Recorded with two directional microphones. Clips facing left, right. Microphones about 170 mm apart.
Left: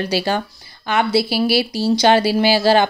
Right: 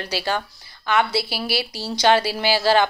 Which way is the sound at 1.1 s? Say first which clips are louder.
Left 8 dB; 5° left (ahead or behind).